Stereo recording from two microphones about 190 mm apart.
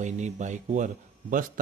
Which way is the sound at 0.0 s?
40° right (ahead or behind).